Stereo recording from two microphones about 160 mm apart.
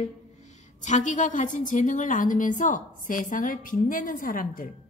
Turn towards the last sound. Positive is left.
turn(degrees=60)  # may be behind; listen again after turning